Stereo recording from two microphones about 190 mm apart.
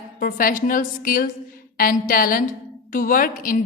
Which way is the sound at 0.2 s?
45° left (ahead or behind).